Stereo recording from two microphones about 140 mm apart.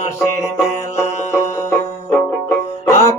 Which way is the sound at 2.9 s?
20° left (ahead or behind).